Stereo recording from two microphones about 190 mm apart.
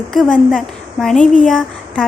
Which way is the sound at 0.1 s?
Centre (ahead or behind).